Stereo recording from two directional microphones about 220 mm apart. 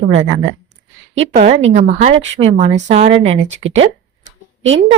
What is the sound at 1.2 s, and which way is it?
Speech, 30° right (ahead or behind).